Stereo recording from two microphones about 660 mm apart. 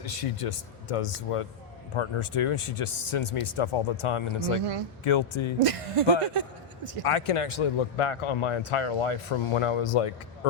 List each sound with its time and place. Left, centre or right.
0.0 s speech: left
5.5 s speech: right
7.0 s speech: left